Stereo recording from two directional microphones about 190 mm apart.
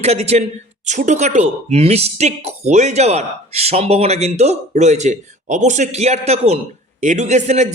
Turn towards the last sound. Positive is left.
turn(degrees=-35)  # may be behind; listen again after turning